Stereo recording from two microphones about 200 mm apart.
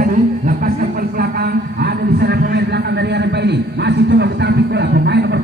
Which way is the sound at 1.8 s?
55° right (ahead or behind).